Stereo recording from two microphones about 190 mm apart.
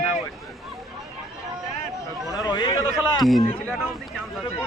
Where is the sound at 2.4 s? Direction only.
20° left (ahead or behind).